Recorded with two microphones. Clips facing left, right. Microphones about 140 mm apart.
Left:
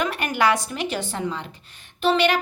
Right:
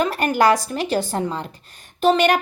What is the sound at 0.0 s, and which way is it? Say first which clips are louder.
A woman's voice: right 4 dB; 35° right (ahead or behind).